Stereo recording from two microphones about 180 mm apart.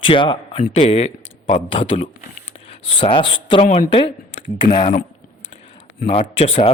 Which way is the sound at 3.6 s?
45° left (ahead or behind).